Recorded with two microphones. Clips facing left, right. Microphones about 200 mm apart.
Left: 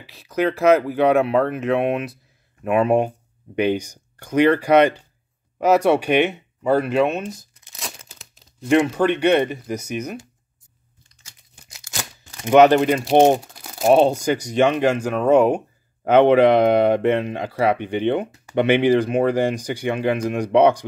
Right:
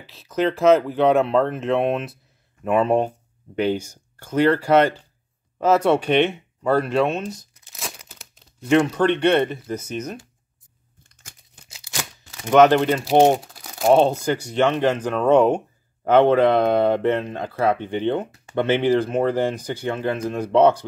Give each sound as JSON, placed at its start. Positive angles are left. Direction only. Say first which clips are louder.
{"t": 0.0, "sound": "speech", "louder": "left 1 dB", "side_deg": 15}
{"t": 8.1, "sound": "crumpling", "louder": "right 1 dB", "side_deg": -5}
{"t": 8.7, "sound": "speech", "louder": "even", "side_deg": 10}
{"t": 12.4, "sound": "speech", "louder": "left 2 dB", "side_deg": 10}
{"t": 13.4, "sound": "crumpling", "louder": "left 1 dB", "side_deg": 0}
{"t": 13.8, "sound": "speech", "louder": "left 1 dB", "side_deg": 15}